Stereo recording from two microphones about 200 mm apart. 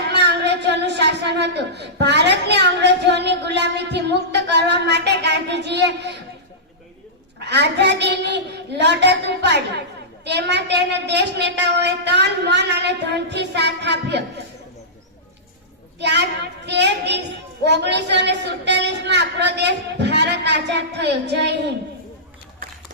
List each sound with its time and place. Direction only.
0.1 s speech: 60° right (ahead or behind)
7.3 s a woman's voice: 60° right (ahead or behind)
16.0 s a woman's voice: 60° right (ahead or behind)